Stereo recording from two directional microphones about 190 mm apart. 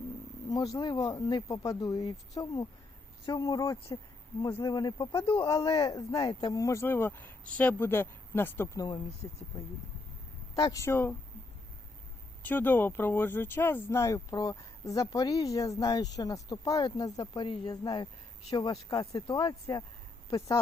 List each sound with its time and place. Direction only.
0.5 s a woman's voice: 20° left (ahead or behind)
10.5 s speech: 20° left (ahead or behind)
12.4 s a woman's voice: 10° left (ahead or behind)